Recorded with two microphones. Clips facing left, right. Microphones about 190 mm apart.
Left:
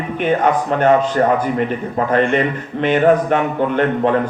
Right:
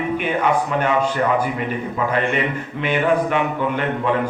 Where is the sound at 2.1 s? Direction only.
45° left (ahead or behind).